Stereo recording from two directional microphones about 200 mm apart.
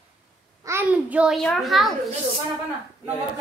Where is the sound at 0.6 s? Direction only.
10° right (ahead or behind).